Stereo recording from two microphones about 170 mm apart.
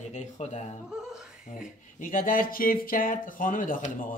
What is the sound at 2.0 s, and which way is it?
Speech, 55° left (ahead or behind).